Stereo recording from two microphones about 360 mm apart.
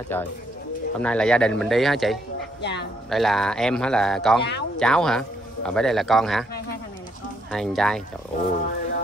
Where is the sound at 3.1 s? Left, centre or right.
Centre.